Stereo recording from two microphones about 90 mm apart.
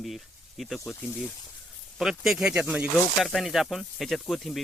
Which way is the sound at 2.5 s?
15° right (ahead or behind).